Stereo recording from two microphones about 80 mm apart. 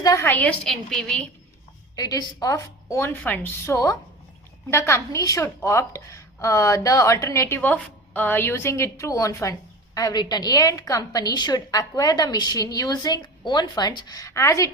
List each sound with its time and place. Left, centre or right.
0.6 s a woman's voice: centre
2.0 s a woman's voice: left
3.0 s a woman's voice: left
4.7 s a woman's voice: left
7.6 s a woman's voice: left